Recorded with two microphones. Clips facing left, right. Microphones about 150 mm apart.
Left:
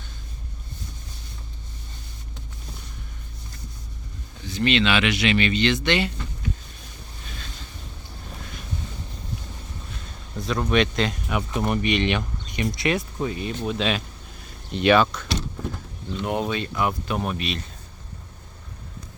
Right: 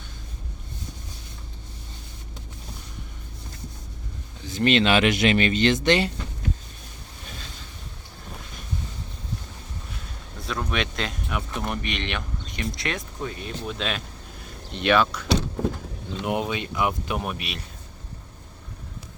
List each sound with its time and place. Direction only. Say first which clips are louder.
4.4 s speech: right 1 dB; 45° right (ahead or behind)
10.4 s speech: left 6 dB; centre (ahead or behind)